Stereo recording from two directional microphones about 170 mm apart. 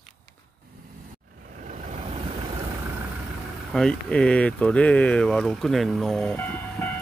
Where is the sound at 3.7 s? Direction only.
5° left (ahead or behind).